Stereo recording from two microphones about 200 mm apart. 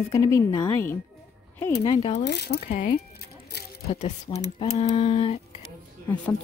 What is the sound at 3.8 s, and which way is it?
Speech, 30° left (ahead or behind).